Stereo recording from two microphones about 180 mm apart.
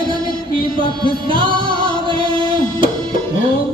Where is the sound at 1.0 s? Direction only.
25° right (ahead or behind).